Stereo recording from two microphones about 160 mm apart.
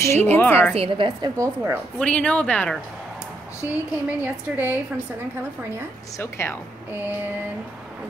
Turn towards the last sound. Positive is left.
turn(degrees=-10)  # may be behind; listen again after turning